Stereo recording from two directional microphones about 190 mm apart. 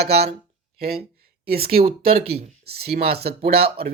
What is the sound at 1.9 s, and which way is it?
Speech, 30° right (ahead or behind).